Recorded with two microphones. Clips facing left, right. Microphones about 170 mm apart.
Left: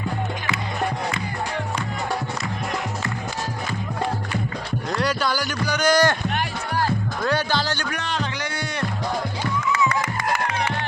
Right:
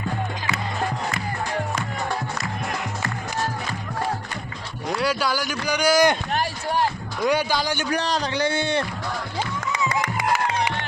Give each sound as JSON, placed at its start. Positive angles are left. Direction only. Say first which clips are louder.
{"t": 4.9, "sound": "speech", "louder": "right 1 dB", "side_deg": -5}
{"t": 7.2, "sound": "speech", "louder": "right 3 dB", "side_deg": -10}
{"t": 7.9, "sound": "speech", "louder": "right 3 dB", "side_deg": -35}
{"t": 10.2, "sound": "music", "louder": "right 1 dB", "side_deg": -10}